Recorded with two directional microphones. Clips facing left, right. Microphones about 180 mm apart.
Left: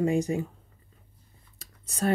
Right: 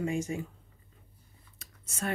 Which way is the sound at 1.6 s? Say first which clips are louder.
Left 7 dB; 35° left (ahead or behind).